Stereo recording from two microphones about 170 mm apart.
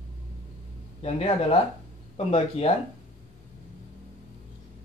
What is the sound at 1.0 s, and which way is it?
Speech, 35° left (ahead or behind).